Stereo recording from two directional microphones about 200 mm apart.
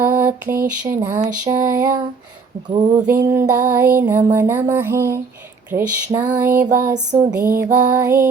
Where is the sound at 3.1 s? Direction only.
10° right (ahead or behind).